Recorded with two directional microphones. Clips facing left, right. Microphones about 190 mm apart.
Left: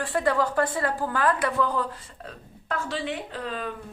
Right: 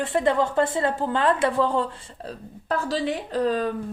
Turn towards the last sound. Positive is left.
turn(degrees=-40)  # may be behind; listen again after turning